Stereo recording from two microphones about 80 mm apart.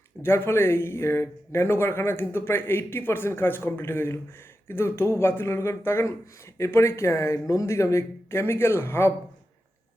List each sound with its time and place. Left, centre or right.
0.2 s speech: left